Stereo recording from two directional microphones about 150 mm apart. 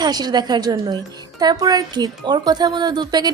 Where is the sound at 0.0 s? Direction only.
25° right (ahead or behind).